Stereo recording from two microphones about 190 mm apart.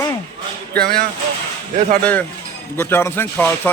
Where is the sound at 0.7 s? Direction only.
55° right (ahead or behind).